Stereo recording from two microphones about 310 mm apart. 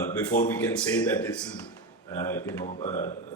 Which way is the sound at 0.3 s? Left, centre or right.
Left.